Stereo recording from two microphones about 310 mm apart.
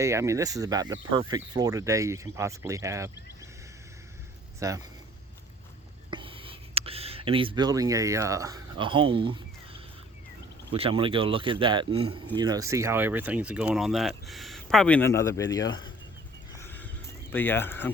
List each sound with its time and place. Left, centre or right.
0.0 s speech: centre
4.6 s speech: centre
6.1 s a sound: centre
10.7 s speech: centre
16.6 s a sound: centre
17.3 s speech: centre